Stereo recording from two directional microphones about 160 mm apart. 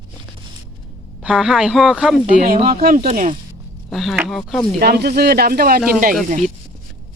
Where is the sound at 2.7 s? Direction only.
60° right (ahead or behind).